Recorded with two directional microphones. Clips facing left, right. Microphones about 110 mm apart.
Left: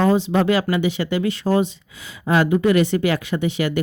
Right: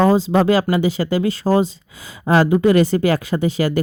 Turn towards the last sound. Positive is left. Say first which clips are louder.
# right 3 dB
turn(degrees=-40)  # may be behind; listen again after turning